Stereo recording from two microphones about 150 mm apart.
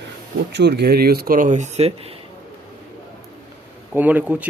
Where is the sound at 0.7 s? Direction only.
90° right; by 1.9 s 50° right (ahead or behind).